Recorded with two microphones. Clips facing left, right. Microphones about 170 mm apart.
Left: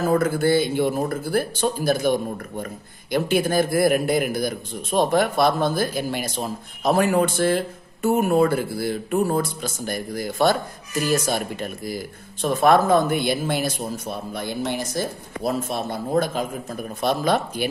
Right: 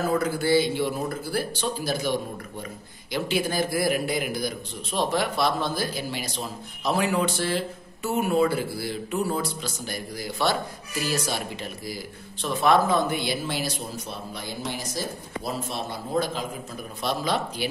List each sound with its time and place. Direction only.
0.1 s a man's voice: 50° left (ahead or behind)